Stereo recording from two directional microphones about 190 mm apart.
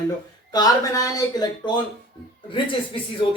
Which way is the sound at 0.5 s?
20° left (ahead or behind).